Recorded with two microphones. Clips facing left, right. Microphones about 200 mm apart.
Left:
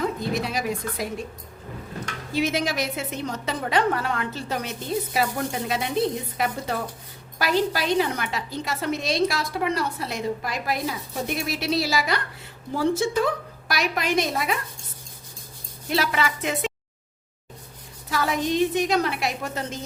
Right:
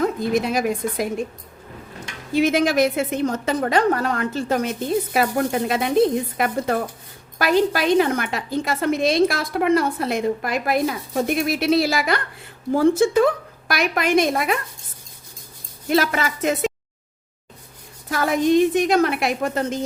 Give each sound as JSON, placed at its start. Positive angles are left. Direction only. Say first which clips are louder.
{"t": 0.0, "sound": "a woman's voice", "louder": "right 5 dB", "side_deg": -50}
{"t": 2.3, "sound": "a woman's voice", "louder": "right 7 dB", "side_deg": -50}
{"t": 15.9, "sound": "a woman's voice", "louder": "right 4 dB", "side_deg": -45}
{"t": 18.1, "sound": "a woman's voice", "louder": "right 7 dB", "side_deg": -50}